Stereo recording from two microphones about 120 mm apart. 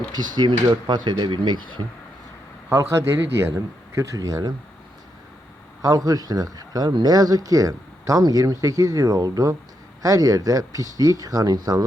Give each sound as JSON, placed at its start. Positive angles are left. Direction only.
{"t": 0.1, "sound": "speech", "side_deg": -40}
{"t": 2.6, "sound": "a man's voice", "side_deg": -20}
{"t": 5.8, "sound": "speech", "side_deg": -30}